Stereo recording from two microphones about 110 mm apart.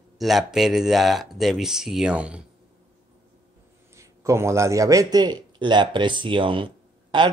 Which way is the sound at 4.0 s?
25° right (ahead or behind).